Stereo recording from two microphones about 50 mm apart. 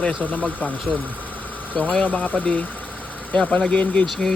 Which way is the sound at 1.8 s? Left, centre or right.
Left.